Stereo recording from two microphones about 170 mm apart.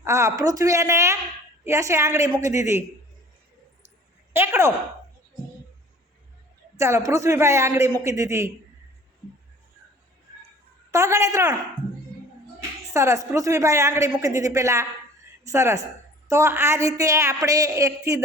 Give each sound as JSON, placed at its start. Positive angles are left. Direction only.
{"t": 0.0, "sound": "a woman's voice", "side_deg": -15}
{"t": 4.3, "sound": "a woman's voice", "side_deg": -15}
{"t": 6.7, "sound": "a woman's voice", "side_deg": -15}
{"t": 10.9, "sound": "a woman's voice", "side_deg": -15}
{"t": 12.9, "sound": "a woman's voice", "side_deg": -15}